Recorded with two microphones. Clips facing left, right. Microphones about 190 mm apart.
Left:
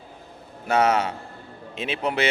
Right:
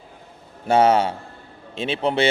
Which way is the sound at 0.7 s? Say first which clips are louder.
Right 4 dB; 30° right (ahead or behind).